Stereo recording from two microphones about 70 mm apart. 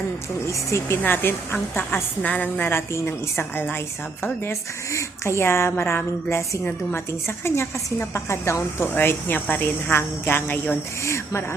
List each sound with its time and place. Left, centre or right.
0.4 s speech: left
1.0 s a woman's voice: left
2.2 s a woman's voice: left
4.9 s a woman's voice: left
7.1 s a woman's voice: left
8.9 s a woman's voice: left
11.0 s speech: left